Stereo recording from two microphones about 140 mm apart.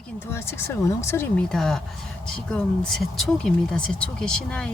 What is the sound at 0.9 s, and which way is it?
Speech, 20° left (ahead or behind).